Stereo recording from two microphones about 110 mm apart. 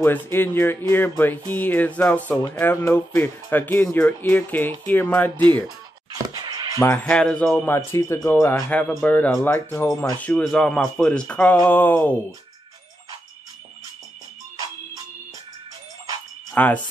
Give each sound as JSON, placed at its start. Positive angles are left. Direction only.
{"t": 0.0, "sound": "speech", "side_deg": 20}
{"t": 2.8, "sound": "speech", "side_deg": 25}
{"t": 6.3, "sound": "music", "side_deg": -40}
{"t": 6.8, "sound": "speech", "side_deg": 20}
{"t": 7.6, "sound": "speech", "side_deg": 20}
{"t": 10.3, "sound": "speech", "side_deg": 5}
{"t": 16.5, "sound": "cricket", "side_deg": 15}